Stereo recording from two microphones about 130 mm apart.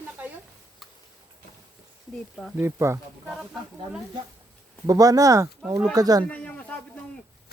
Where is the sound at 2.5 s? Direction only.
20° right (ahead or behind).